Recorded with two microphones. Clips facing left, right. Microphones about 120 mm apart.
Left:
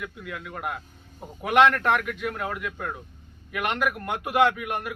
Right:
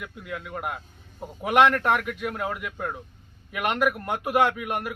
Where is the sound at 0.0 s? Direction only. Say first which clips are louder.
Even; 10° right (ahead or behind).